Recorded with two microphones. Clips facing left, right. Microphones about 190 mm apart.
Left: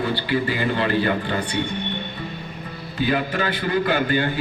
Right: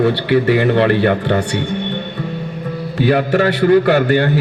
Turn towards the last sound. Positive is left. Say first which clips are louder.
# right 8 dB
turn(degrees=-70)  # may be behind; listen again after turning